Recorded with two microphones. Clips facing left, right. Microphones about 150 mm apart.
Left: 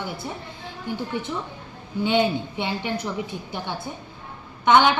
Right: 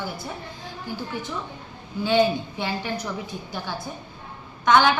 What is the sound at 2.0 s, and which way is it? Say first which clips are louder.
Speech: right 1 dB; 20° left (ahead or behind).